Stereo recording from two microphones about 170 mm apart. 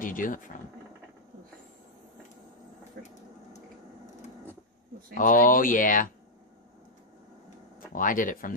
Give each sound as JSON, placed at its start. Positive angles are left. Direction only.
{"t": 0.0, "sound": "speech", "side_deg": 50}
{"t": 3.0, "sound": "a sound", "side_deg": -65}
{"t": 5.1, "sound": "speech", "side_deg": 50}
{"t": 7.9, "sound": "speech", "side_deg": 50}